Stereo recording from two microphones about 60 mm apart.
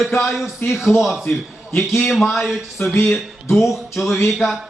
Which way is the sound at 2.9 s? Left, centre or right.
Left.